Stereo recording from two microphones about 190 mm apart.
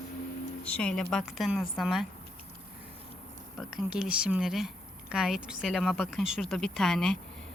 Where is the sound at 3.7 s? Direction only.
5° right (ahead or behind).